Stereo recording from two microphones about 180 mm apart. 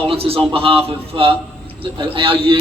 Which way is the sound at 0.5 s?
30° right (ahead or behind).